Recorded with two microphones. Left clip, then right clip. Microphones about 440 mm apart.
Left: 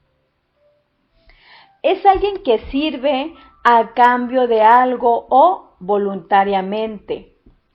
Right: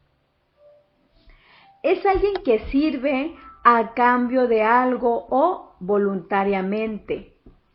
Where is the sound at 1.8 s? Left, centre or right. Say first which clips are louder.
Left 6 dB; centre.